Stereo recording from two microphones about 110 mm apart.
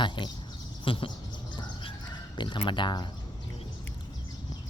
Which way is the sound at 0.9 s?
55° left (ahead or behind).